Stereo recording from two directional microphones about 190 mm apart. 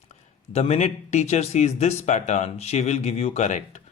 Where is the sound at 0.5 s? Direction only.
35° left (ahead or behind).